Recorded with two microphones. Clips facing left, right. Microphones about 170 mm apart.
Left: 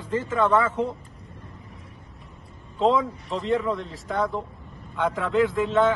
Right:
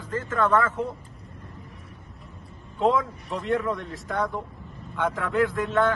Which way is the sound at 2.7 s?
Centre (ahead or behind).